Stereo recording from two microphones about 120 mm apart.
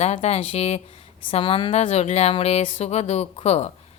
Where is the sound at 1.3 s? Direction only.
50° left (ahead or behind).